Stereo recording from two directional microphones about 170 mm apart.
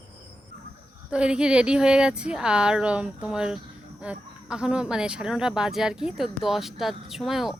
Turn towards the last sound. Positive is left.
turn(degrees=0)  # may be behind; listen again after turning